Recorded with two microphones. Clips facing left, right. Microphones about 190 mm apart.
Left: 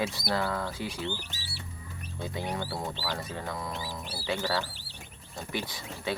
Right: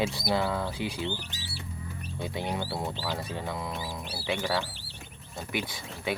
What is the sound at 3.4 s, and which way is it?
Speech, 5° right (ahead or behind).